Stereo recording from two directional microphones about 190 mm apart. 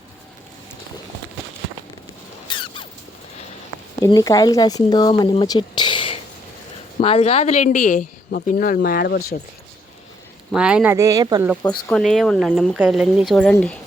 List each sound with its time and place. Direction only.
2.5 s mouse: 25° left (ahead or behind)
4.0 s speech: 20° left (ahead or behind); by 9.4 s 55° left (ahead or behind)
10.5 s speech: 5° right (ahead or behind)
10.9 s speech: 15° right (ahead or behind)
11.9 s speech: centre (ahead or behind)